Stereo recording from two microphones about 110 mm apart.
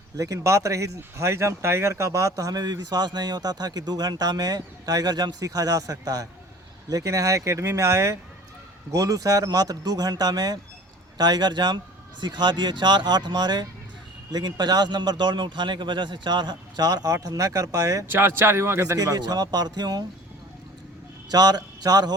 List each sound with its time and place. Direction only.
0.2 s speech: 30° right (ahead or behind)
18.0 s speech: 20° right (ahead or behind); by 20.1 s 35° right (ahead or behind)
21.2 s speech: 40° right (ahead or behind)